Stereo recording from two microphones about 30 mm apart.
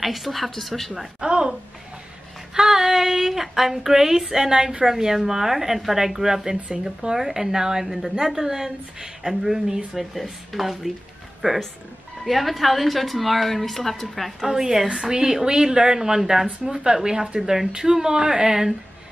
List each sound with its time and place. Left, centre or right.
0.0 s a woman's voice: centre
1.2 s a sound: right
2.5 s a woman's voice: centre
11.4 s a woman's voice: right
12.3 s a woman's voice: centre
14.4 s a woman's voice: centre
17.4 s speech: centre
17.9 s a woman's voice: centre